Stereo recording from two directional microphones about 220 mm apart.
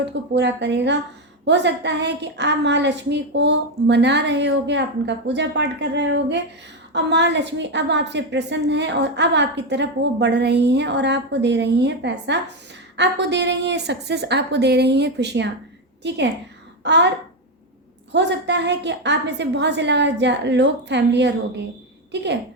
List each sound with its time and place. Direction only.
0.0 s a woman's voice: 50° right (ahead or behind)
18.1 s a woman's voice: 50° right (ahead or behind)